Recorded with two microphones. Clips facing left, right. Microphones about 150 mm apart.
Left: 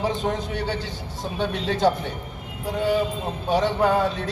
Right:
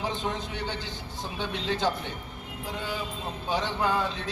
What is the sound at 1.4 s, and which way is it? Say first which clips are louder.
Speech: left 6 dB; 50° left (ahead or behind).